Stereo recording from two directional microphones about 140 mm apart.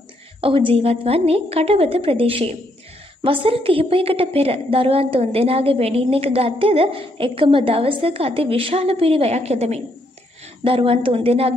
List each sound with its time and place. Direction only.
0.4 s a woman's voice: 40° right (ahead or behind)